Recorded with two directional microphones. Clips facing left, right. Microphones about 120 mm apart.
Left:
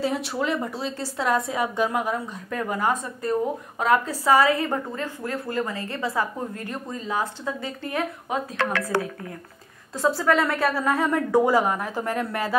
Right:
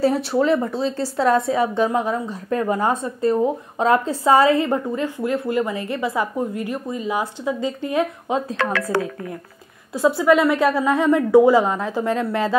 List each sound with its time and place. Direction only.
0.0 s a woman's voice: 35° right (ahead or behind); by 8.4 s 20° right (ahead or behind)
9.9 s a woman's voice: 15° right (ahead or behind)